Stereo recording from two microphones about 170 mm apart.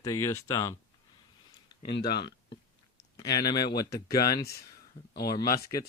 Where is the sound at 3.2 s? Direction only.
25° left (ahead or behind).